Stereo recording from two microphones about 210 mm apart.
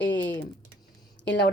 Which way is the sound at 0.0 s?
60° left (ahead or behind).